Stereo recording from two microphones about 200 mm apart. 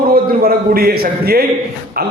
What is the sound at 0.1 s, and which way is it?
A man's voice, 45° right (ahead or behind).